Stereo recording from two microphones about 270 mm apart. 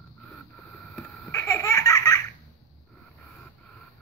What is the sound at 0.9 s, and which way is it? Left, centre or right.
Laughter, centre.